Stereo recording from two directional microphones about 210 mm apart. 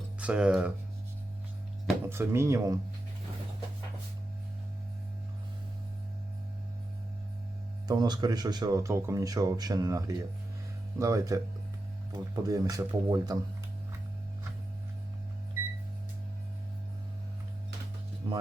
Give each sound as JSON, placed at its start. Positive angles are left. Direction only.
{"t": 0.2, "sound": "speech", "side_deg": -5}
{"t": 2.0, "sound": "speech", "side_deg": -10}
{"t": 7.9, "sound": "speech", "side_deg": -20}
{"t": 18.2, "sound": "music", "side_deg": -25}